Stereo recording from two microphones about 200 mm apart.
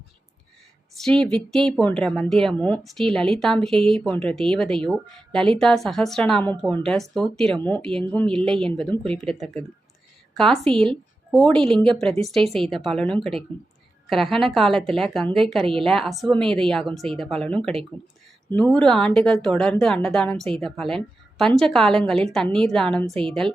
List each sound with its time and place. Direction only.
0.9 s a woman's voice: 5° left (ahead or behind)